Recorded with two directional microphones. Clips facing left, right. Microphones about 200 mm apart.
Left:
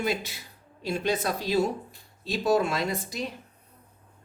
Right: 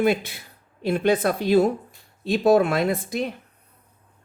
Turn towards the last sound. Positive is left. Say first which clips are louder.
# right 7 dB
turn(degrees=-55)  # may be behind; listen again after turning